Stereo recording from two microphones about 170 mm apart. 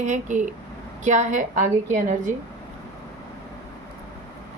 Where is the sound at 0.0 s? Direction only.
45° right (ahead or behind).